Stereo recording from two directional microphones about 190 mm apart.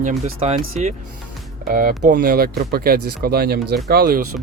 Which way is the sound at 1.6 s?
45° right (ahead or behind).